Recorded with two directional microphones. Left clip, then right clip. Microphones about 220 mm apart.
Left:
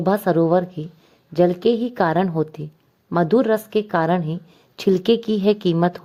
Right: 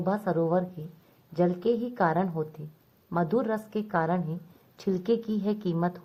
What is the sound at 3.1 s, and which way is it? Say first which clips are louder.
Speech: left 10 dB; 35° left (ahead or behind).